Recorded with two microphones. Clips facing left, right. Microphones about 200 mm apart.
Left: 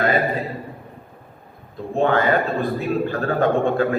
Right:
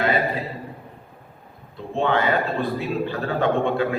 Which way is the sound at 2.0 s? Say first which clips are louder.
Left 3 dB; 45° left (ahead or behind).